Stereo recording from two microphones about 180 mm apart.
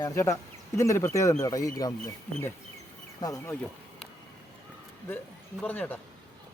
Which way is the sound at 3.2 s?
20° left (ahead or behind).